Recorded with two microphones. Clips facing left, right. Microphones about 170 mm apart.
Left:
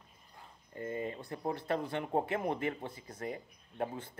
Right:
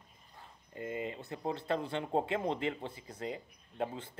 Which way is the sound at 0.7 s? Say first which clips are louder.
Left 1 dB; 20° right (ahead or behind).